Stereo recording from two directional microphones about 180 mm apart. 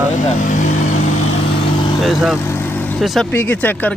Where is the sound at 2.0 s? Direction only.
Centre (ahead or behind).